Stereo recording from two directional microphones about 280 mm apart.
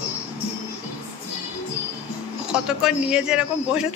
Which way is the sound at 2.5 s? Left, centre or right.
Centre.